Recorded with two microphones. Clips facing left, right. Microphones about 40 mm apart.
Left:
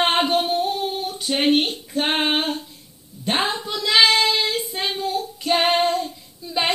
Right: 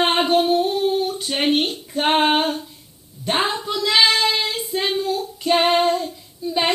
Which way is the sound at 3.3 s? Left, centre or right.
Centre.